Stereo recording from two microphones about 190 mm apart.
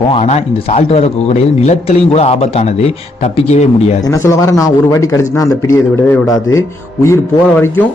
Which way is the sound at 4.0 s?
15° left (ahead or behind).